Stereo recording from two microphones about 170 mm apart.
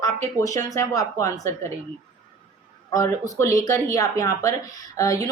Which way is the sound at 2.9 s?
20° left (ahead or behind).